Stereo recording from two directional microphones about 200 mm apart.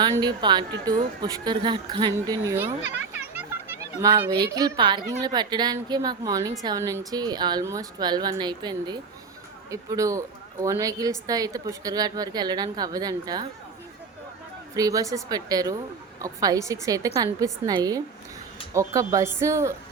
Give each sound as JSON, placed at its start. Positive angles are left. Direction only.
{"t": 0.0, "sound": "a woman's voice", "side_deg": -20}
{"t": 3.2, "sound": "a sound", "side_deg": -10}
{"t": 4.4, "sound": "a woman's voice", "side_deg": -15}
{"t": 14.8, "sound": "a woman's voice", "side_deg": -15}